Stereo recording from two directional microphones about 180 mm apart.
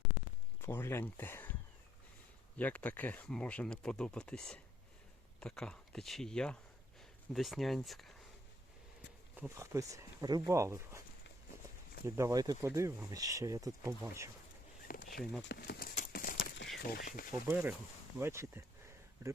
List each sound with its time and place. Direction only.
0.6 s speech: 15° left (ahead or behind)
2.6 s speech: 10° left (ahead or behind)
9.3 s speech: 10° right (ahead or behind)
12.0 s speech: 15° right (ahead or behind)
14.8 s a sound: 55° left (ahead or behind)
15.2 s speech: 5° left (ahead or behind)
15.4 s a sound: 60° left (ahead or behind)
16.0 s clip-clop: 50° left (ahead or behind)
16.7 s speech: 50° left (ahead or behind)
17.5 s speech: 10° right (ahead or behind)